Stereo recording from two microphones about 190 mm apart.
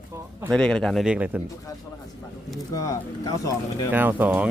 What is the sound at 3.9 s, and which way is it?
Speech, 10° right (ahead or behind).